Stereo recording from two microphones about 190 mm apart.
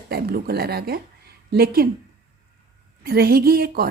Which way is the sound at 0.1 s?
50° right (ahead or behind).